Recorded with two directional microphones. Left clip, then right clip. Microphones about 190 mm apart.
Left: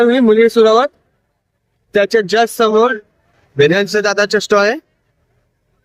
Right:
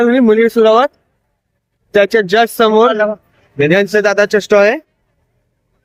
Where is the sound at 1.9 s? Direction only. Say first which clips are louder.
Right 2 dB; 20° right (ahead or behind).